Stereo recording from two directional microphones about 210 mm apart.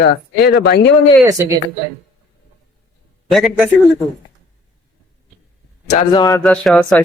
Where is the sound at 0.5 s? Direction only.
50° left (ahead or behind).